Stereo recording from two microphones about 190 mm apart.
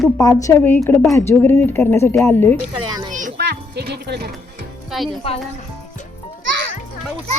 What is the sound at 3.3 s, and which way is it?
Music, 60° right (ahead or behind).